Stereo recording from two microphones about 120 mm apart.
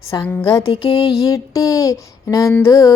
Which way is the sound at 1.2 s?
30° left (ahead or behind).